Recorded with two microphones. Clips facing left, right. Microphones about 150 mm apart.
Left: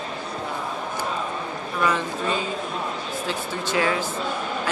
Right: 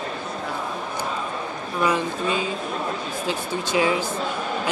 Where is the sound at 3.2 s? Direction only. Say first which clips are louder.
Right 3 dB; 15° right (ahead or behind).